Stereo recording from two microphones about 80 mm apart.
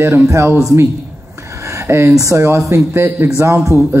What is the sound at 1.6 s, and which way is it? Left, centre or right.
A man's voice, right.